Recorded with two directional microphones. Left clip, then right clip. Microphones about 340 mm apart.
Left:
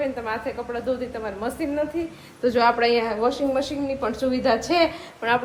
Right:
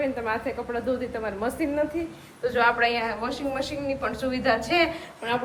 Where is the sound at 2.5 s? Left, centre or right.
Centre.